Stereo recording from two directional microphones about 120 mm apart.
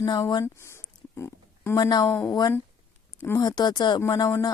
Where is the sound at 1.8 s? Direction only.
35° left (ahead or behind).